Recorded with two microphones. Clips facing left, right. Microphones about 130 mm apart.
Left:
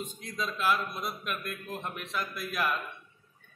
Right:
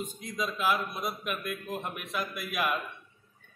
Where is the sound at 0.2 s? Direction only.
5° right (ahead or behind).